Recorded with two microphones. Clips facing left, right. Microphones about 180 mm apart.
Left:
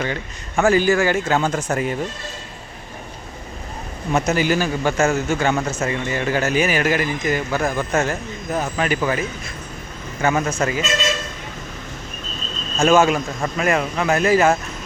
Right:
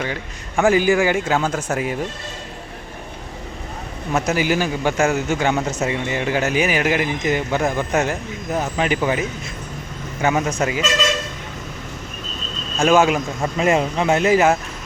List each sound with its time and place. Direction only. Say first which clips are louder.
0.0 s a man's voice: left 1 dB; 5° right (ahead or behind)
4.1 s a man's voice: left 1 dB; 10° right (ahead or behind)
12.8 s a man's voice: even; 15° right (ahead or behind)
13.6 s speech: right 2 dB; 25° right (ahead or behind)